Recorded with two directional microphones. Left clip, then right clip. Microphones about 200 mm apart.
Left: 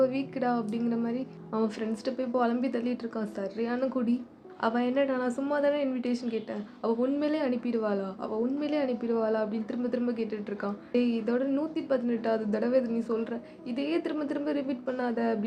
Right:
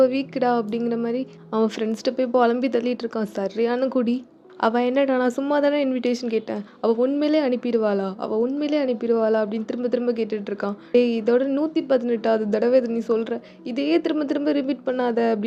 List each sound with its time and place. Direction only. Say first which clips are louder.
0.0 s a woman's voice: right 8 dB; 40° right (ahead or behind)